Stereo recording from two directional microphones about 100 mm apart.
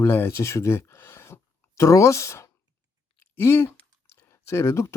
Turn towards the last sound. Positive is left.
turn(degrees=30)  # may be behind; listen again after turning